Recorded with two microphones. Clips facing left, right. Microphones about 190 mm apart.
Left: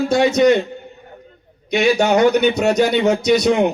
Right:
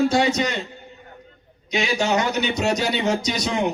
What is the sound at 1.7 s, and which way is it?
A man's voice, 55° left (ahead or behind).